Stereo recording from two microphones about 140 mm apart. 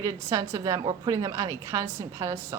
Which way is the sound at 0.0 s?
20° right (ahead or behind).